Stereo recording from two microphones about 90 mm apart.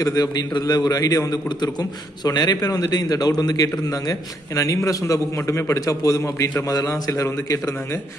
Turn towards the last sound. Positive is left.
turn(degrees=30)  # may be behind; listen again after turning